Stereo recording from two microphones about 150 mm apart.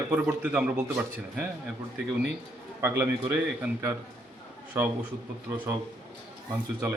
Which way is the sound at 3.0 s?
10° right (ahead or behind).